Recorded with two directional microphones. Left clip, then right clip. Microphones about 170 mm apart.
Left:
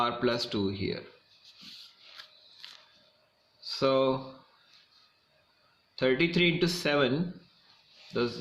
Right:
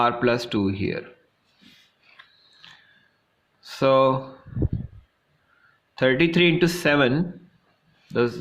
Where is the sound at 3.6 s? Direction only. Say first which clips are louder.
Right 8 dB; 50° right (ahead or behind).